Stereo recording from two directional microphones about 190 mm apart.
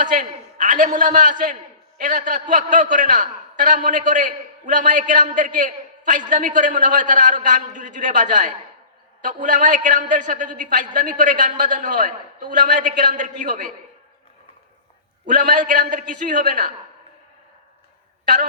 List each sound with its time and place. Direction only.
0.0 s a man's voice: 45° right (ahead or behind)
15.3 s a man's voice: 45° right (ahead or behind)